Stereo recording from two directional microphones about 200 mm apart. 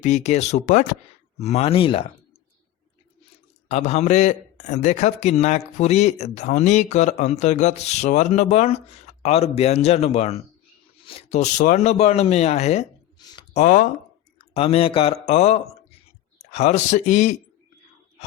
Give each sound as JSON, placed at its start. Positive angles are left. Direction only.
{"t": 0.0, "sound": "a man's voice", "side_deg": 35}
{"t": 3.7, "sound": "a man's voice", "side_deg": 35}